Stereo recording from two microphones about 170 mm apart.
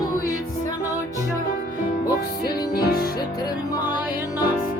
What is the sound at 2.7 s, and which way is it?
Music, 65° left (ahead or behind).